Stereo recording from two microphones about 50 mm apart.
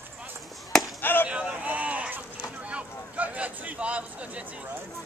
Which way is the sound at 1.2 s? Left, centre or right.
Right.